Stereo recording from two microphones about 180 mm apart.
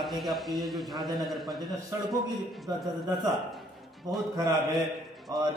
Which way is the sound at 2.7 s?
20° right (ahead or behind).